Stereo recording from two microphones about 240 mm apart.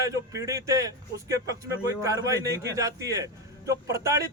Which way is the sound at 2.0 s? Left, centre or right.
Centre.